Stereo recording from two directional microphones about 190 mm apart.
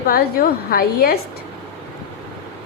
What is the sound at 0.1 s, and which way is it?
A woman's voice, 50° left (ahead or behind).